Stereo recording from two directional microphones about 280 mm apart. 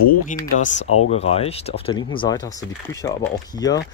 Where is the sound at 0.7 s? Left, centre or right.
Left.